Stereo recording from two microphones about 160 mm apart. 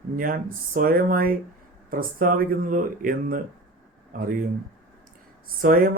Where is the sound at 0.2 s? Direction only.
60° right (ahead or behind).